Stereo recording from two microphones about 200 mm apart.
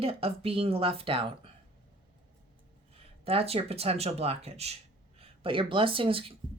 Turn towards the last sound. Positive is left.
turn(degrees=-25)  # may be behind; listen again after turning